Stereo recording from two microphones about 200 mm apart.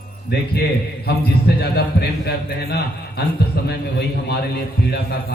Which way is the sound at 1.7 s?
55° left (ahead or behind).